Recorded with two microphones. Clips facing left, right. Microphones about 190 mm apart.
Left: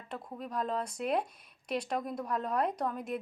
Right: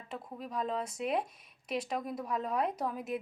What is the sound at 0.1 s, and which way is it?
A woman's voice, centre (ahead or behind).